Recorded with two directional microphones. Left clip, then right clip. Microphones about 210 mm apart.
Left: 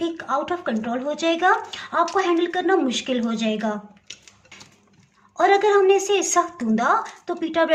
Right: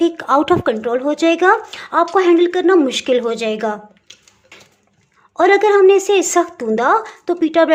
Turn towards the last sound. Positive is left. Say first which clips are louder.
# right 8 dB
turn(degrees=-40)  # may be behind; listen again after turning